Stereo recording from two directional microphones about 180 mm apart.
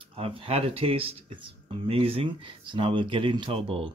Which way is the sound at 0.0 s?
30° right (ahead or behind).